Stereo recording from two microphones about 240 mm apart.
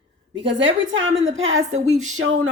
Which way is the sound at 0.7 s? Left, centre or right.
Right.